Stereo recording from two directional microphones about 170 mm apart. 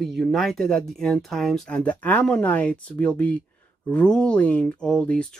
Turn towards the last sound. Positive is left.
turn(degrees=5)  # may be behind; listen again after turning